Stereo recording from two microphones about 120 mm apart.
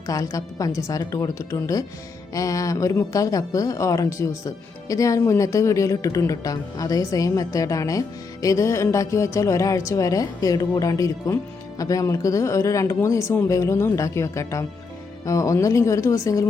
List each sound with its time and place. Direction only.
0.1 s speech: 30° left (ahead or behind)